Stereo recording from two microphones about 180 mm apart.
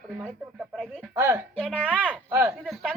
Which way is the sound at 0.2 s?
5° right (ahead or behind).